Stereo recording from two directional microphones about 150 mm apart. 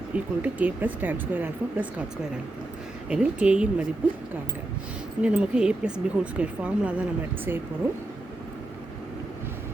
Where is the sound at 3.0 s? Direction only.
5° right (ahead or behind).